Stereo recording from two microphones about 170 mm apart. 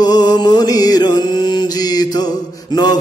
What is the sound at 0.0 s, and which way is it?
Mantra, 25° left (ahead or behind).